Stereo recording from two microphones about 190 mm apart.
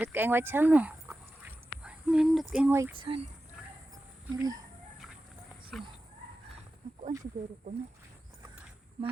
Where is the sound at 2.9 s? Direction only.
25° right (ahead or behind).